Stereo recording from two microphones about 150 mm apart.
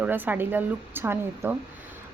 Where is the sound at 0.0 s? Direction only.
10° right (ahead or behind).